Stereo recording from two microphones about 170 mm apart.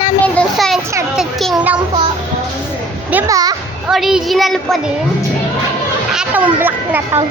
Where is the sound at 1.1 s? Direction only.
Centre (ahead or behind).